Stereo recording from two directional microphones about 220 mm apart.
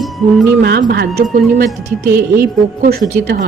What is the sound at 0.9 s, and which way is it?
Speech, 45° right (ahead or behind).